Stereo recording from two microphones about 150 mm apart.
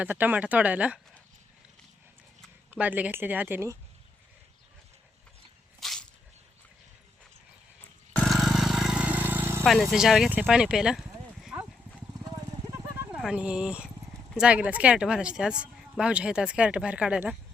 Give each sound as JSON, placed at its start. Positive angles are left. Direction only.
{"t": 0.0, "sound": "speech", "side_deg": -10}
{"t": 2.6, "sound": "speech", "side_deg": -10}
{"t": 5.8, "sound": "a sound", "side_deg": 0}
{"t": 8.1, "sound": "vehicle", "side_deg": 0}
{"t": 9.6, "sound": "speech", "side_deg": 0}
{"t": 10.4, "sound": "a sound", "side_deg": -5}
{"t": 12.2, "sound": "horse", "side_deg": -20}
{"t": 13.2, "sound": "speech", "side_deg": -5}